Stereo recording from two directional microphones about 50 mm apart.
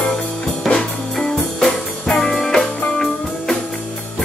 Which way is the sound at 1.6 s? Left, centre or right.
Centre.